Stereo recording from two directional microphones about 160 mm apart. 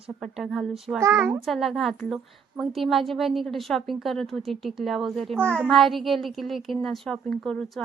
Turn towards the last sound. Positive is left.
turn(degrees=5)  # may be behind; listen again after turning